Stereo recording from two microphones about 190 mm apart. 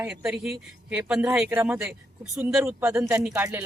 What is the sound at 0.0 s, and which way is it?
A man's voice, 5° right (ahead or behind).